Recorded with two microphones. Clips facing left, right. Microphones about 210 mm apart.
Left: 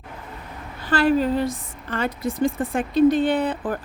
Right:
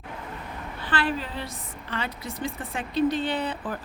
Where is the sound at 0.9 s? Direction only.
40° left (ahead or behind).